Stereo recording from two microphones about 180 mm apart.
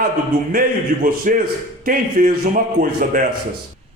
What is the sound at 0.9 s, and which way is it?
A man's voice, 50° right (ahead or behind).